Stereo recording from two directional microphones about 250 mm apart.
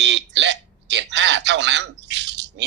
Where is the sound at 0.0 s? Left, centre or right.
Right.